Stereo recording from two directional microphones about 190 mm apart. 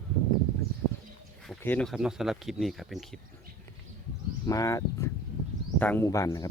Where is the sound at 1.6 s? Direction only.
5° left (ahead or behind).